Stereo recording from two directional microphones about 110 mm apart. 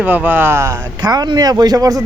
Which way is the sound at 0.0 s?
15° right (ahead or behind).